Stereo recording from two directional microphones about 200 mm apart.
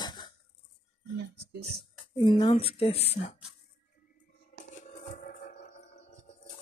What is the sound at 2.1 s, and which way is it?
Speech, 25° left (ahead or behind).